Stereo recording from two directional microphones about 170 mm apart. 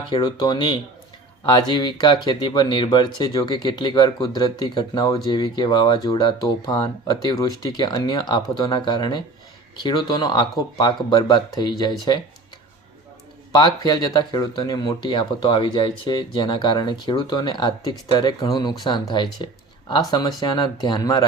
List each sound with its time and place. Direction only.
0.1 s speech: 25° left (ahead or behind)
13.5 s speech: 25° left (ahead or behind)